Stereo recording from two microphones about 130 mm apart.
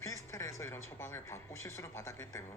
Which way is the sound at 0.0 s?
25° left (ahead or behind).